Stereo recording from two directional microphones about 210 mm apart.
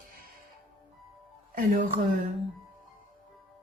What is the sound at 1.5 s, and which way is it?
Speech, 40° right (ahead or behind).